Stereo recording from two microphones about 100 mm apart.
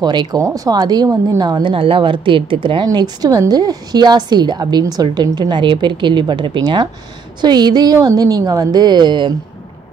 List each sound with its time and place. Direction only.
0.0 s a woman's voice: 45° right (ahead or behind)
0.4 s a woman's voice: 35° right (ahead or behind)
1.7 s a woman's voice: 65° right (ahead or behind)
2.9 s a woman's voice: 40° right (ahead or behind)